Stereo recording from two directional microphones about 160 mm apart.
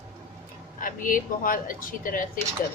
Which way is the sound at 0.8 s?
60° left (ahead or behind).